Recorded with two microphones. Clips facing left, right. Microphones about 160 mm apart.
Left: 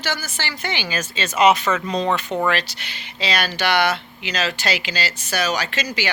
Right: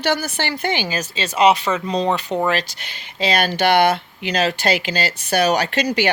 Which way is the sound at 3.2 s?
50° right (ahead or behind).